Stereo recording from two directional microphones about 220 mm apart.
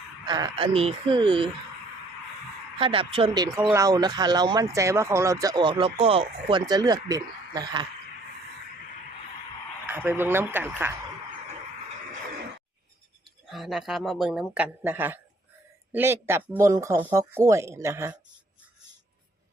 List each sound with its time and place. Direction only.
0.3 s speech: 20° right (ahead or behind)
2.7 s speech: 25° right (ahead or behind)
9.8 s speech: 10° right (ahead or behind)
13.5 s speech: centre (ahead or behind)